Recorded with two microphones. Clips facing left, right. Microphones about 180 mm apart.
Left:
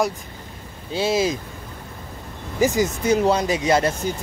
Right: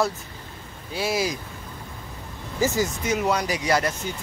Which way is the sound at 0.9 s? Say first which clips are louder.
Left 5 dB; 25° left (ahead or behind).